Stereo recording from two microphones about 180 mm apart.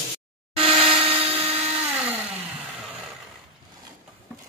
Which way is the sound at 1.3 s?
10° right (ahead or behind).